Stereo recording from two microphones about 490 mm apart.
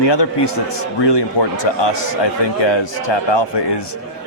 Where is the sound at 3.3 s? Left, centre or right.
Left.